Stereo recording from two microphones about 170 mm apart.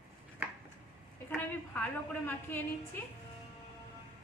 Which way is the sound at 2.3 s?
15° left (ahead or behind).